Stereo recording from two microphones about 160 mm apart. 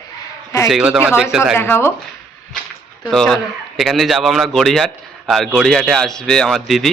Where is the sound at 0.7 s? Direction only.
5° right (ahead or behind).